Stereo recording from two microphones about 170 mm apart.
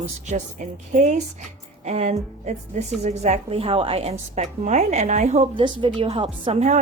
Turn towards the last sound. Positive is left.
turn(degrees=-40)  # may be behind; listen again after turning